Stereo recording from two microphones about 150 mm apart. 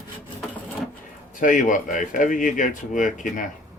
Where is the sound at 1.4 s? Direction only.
60° left (ahead or behind).